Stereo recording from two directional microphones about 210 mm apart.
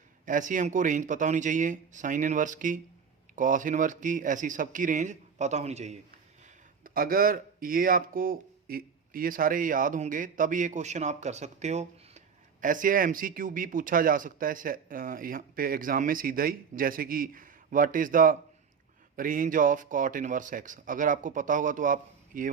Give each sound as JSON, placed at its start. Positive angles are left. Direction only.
{"t": 0.3, "sound": "speech", "side_deg": -40}
{"t": 6.8, "sound": "speech", "side_deg": -45}